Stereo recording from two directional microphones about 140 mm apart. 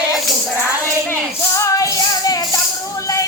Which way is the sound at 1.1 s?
20° left (ahead or behind).